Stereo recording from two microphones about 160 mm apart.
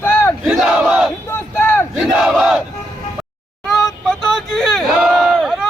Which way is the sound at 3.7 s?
Centre (ahead or behind).